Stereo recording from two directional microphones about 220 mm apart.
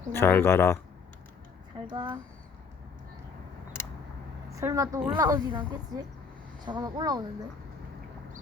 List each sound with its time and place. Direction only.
0.1 s speech: 10° left (ahead or behind)
1.9 s speech: 20° right (ahead or behind)
4.5 s a woman's voice: 15° right (ahead or behind)